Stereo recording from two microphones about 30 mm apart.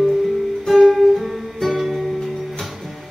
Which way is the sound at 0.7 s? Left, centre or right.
Centre.